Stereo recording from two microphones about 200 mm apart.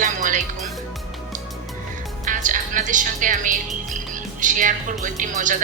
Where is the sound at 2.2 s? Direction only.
40° right (ahead or behind).